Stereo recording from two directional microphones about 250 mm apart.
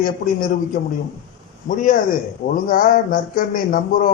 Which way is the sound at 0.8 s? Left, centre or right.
Left.